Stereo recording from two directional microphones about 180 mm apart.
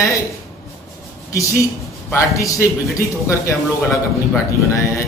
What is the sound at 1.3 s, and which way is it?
A man's voice, 15° left (ahead or behind).